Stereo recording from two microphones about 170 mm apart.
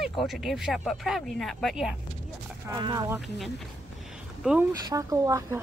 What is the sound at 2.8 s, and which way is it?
Speech, 20° right (ahead or behind).